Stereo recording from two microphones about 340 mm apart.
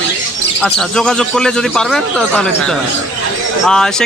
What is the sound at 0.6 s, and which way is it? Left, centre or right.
A man's voice, centre.